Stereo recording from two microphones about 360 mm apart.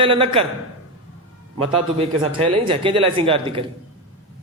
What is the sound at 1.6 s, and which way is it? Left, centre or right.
A man's voice, centre.